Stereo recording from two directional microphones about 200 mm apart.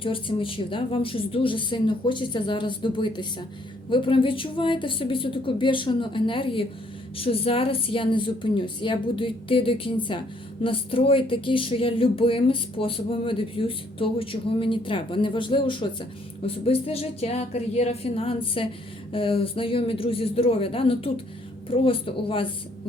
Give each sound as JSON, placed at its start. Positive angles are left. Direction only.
{"t": 0.0, "sound": "speech", "side_deg": 25}